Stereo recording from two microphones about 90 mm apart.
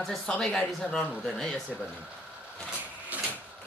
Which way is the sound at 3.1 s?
15° right (ahead or behind).